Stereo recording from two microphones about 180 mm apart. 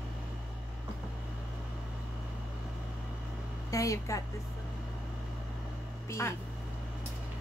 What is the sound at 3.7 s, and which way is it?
Speech, 20° left (ahead or behind).